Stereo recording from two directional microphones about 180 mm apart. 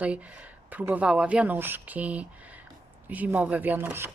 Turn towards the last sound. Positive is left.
turn(degrees=-10)  # may be behind; listen again after turning